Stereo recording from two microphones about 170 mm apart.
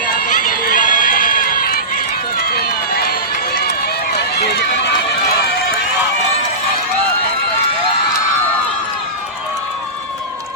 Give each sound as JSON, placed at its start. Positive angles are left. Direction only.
{"t": 0.3, "sound": "run", "side_deg": 50}
{"t": 4.4, "sound": "run", "side_deg": 75}